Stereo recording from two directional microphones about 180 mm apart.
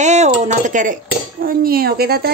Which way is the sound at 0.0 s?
40° right (ahead or behind).